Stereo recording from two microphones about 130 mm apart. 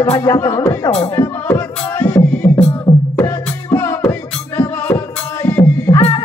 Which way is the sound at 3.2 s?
20° left (ahead or behind).